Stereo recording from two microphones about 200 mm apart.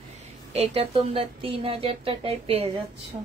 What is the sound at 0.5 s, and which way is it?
Speech, 30° right (ahead or behind).